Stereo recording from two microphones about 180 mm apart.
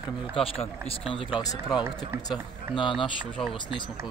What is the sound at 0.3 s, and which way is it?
Speech, 30° left (ahead or behind).